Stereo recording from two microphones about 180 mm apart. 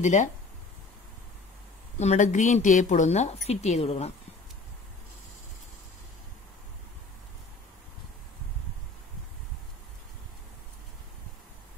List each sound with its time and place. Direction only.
0.0 s a woman's voice: 40° left (ahead or behind)
2.0 s a woman's voice: 40° left (ahead or behind)